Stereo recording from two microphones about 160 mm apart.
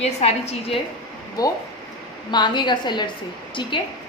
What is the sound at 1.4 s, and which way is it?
A woman's voice, 25° left (ahead or behind).